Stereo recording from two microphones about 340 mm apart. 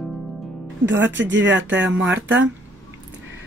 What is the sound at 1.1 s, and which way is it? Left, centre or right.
Speech, right.